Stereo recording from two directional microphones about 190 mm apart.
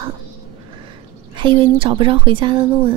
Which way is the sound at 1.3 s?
25° right (ahead or behind).